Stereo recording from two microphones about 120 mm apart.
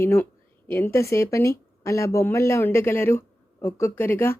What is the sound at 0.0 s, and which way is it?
Speech, 20° left (ahead or behind).